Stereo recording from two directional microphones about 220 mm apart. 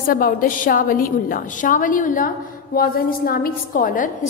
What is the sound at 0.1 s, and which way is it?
A woman's voice, 40° left (ahead or behind).